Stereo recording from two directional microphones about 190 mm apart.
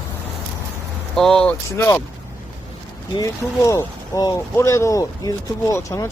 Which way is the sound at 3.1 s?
15° left (ahead or behind).